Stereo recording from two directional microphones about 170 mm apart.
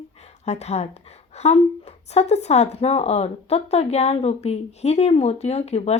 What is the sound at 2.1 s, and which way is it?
A woman's voice, 40° left (ahead or behind).